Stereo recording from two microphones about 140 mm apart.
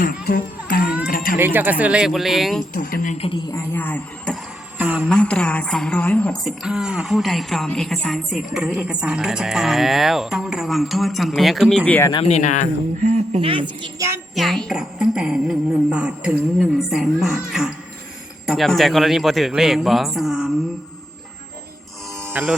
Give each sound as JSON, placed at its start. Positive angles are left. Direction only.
{"t": 0.0, "sound": "speech", "side_deg": 85}
{"t": 1.0, "sound": "a sound", "side_deg": 90}
{"t": 1.4, "sound": "speech", "side_deg": -15}
{"t": 2.7, "sound": "speech", "side_deg": 90}
{"t": 3.8, "sound": "speech", "side_deg": 10}
{"t": 4.8, "sound": "speech", "side_deg": -10}
{"t": 5.0, "sound": "a woman's voice", "side_deg": 5}
{"t": 6.4, "sound": "speech", "side_deg": -5}
{"t": 12.2, "sound": "speech", "side_deg": 55}
{"t": 13.0, "sound": "speech", "side_deg": -55}
{"t": 14.3, "sound": "speech", "side_deg": 0}
{"t": 22.2, "sound": "music", "side_deg": -15}